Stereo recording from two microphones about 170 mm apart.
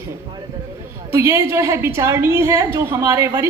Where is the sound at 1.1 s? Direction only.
15° right (ahead or behind).